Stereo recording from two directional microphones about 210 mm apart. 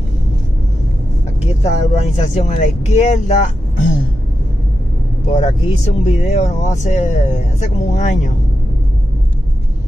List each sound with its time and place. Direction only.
1.4 s speech: 30° left (ahead or behind)
5.3 s speech: 30° left (ahead or behind)